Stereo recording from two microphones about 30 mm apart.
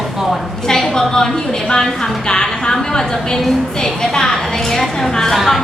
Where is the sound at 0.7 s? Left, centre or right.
Centre.